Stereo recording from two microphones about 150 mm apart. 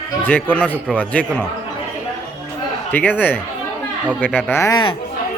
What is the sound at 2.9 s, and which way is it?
Speech, 10° left (ahead or behind).